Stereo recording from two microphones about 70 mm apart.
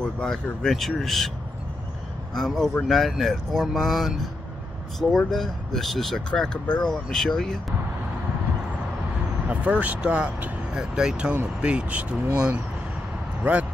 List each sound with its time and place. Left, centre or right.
0.0 s speech: centre
2.3 s speech: centre
9.5 s speech: right
13.4 s vehicle: right